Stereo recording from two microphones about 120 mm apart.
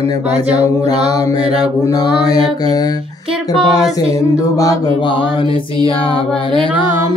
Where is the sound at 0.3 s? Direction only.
65° right (ahead or behind).